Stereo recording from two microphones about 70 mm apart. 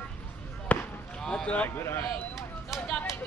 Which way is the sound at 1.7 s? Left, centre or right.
Left.